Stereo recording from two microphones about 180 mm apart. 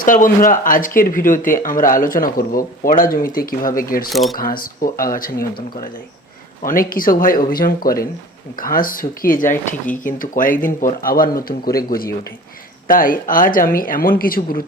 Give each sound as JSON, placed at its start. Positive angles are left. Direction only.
{"t": 0.0, "sound": "speech", "side_deg": 50}
{"t": 4.1, "sound": "speech", "side_deg": 0}
{"t": 4.4, "sound": "speech", "side_deg": 50}
{"t": 12.9, "sound": "speech", "side_deg": 50}